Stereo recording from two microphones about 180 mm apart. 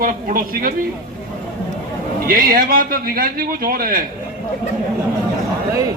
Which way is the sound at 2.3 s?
55° right (ahead or behind).